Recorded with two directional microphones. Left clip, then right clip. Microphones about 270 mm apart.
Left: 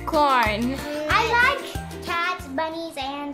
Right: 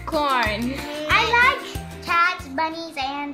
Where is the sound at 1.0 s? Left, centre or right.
Left.